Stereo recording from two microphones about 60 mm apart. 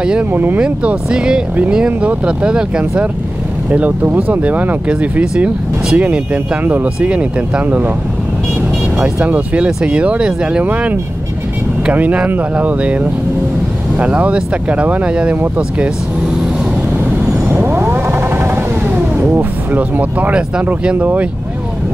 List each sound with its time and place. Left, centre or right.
0.3 s speech: right
0.6 s speech: centre
3.7 s speech: right
7.0 s speech: centre
8.9 s speech: right
10.6 s speech: right
17.6 s vehicle: right
20.8 s speech: right